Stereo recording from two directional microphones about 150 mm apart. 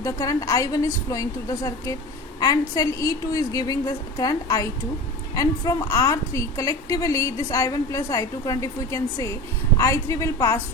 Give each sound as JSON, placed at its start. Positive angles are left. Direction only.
{"t": 0.0, "sound": "a woman's voice", "side_deg": 20}